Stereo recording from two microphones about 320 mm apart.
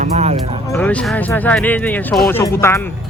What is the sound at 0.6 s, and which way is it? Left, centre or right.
Speech, centre.